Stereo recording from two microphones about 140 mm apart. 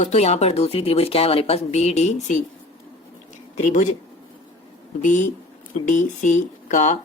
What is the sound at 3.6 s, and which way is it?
Speech, 65° left (ahead or behind).